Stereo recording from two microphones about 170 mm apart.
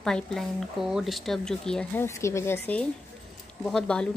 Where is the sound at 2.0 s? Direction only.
15° left (ahead or behind).